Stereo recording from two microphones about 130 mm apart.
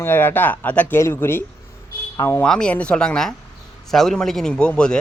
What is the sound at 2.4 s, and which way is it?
A man's voice, 10° left (ahead or behind).